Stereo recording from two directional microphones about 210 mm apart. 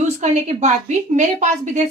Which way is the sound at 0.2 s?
35° right (ahead or behind).